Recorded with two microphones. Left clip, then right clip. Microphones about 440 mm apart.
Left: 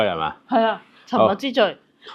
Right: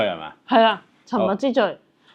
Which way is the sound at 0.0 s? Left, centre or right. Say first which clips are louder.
Left 3 dB; left.